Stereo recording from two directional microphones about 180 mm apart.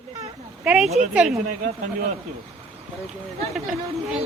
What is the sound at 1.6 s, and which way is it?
Speech, 45° right (ahead or behind).